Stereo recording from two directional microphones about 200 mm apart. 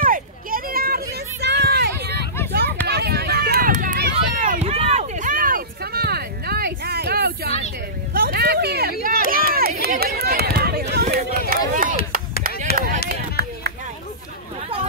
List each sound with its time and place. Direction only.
0.0 s a sound: 45° right (ahead or behind)
2.9 s run: 55° right (ahead or behind)
4.6 s a sound: 30° right (ahead or behind); by 8.9 s 55° right (ahead or behind)
9.3 s run: 45° right (ahead or behind)
11.7 s chop: 40° right (ahead or behind)
12.7 s run: 45° right (ahead or behind)